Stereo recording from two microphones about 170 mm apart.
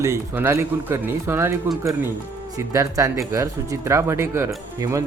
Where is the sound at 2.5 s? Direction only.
20° right (ahead or behind).